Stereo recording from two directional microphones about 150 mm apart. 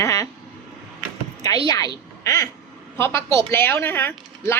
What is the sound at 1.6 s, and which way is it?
A woman's voice, 25° left (ahead or behind).